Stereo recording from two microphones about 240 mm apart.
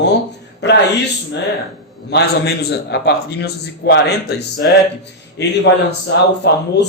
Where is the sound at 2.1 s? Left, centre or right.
Left.